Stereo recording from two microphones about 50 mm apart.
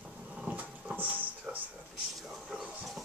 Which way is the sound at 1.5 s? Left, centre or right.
Centre.